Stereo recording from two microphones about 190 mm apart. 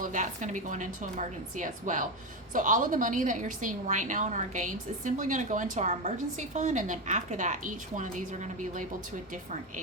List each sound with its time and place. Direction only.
0.0 s a woman's voice: 40° right (ahead or behind)